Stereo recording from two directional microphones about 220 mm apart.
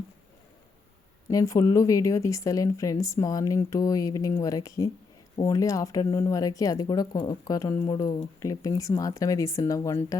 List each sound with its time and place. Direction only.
1.3 s speech: 15° left (ahead or behind)